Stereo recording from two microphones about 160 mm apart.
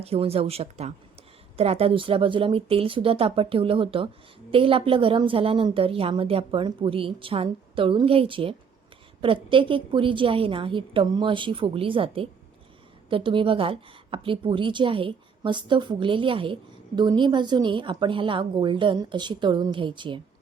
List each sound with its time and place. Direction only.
0.0 s a woman's voice: 40° right (ahead or behind)